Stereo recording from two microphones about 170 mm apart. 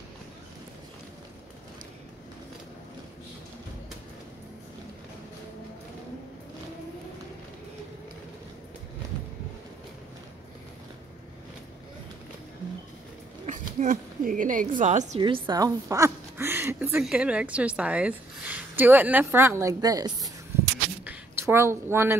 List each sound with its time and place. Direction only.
13.5 s a woman's voice: 50° right (ahead or behind)
15.1 s a woman's voice: 30° right (ahead or behind)
21.0 s a sound: 10° right (ahead or behind)